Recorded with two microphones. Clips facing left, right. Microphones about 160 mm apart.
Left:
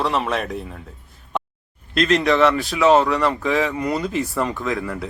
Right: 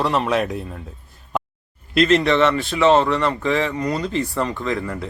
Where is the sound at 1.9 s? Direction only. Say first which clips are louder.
Right 1 dB; centre (ahead or behind).